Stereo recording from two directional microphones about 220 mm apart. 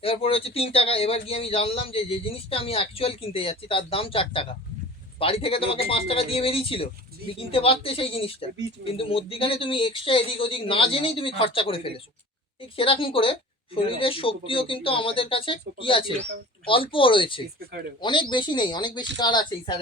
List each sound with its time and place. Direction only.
0.0 s a man's voice: 25° left (ahead or behind)